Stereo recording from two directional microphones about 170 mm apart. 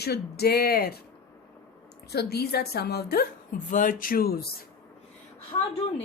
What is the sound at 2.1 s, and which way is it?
A woman's voice, 70° left (ahead or behind).